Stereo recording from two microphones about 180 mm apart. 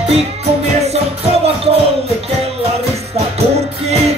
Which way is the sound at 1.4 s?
35° right (ahead or behind).